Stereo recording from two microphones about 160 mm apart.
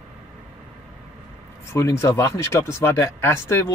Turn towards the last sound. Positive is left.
turn(degrees=15)  # may be behind; listen again after turning